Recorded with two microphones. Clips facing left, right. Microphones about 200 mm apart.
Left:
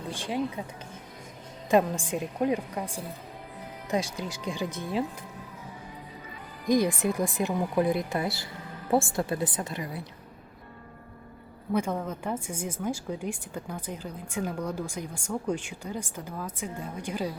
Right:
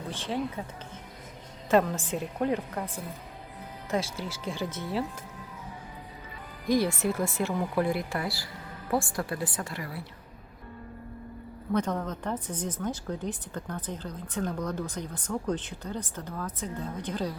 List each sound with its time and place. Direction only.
0.1 s a woman's voice: 10° left (ahead or behind)
1.7 s a woman's voice: 15° left (ahead or behind)
6.7 s a woman's voice: 15° left (ahead or behind)
11.7 s a woman's voice: 10° left (ahead or behind)